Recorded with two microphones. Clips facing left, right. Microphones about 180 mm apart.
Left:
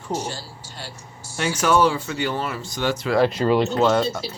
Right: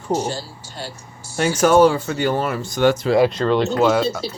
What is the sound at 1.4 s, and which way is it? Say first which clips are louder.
Speech: right 5 dB; 45° right (ahead or behind).